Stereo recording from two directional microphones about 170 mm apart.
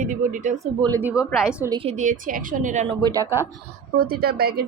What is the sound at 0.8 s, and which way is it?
Speech, 20° right (ahead or behind).